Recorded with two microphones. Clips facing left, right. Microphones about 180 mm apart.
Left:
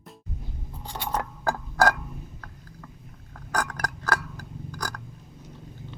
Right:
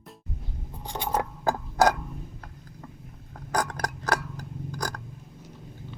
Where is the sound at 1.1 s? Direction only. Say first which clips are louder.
Right 1 dB; 20° right (ahead or behind).